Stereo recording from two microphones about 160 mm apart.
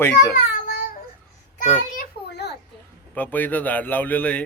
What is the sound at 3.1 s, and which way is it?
Speech, 10° left (ahead or behind).